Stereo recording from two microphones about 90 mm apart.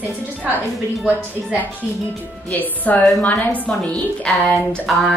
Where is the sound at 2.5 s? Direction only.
20° left (ahead or behind).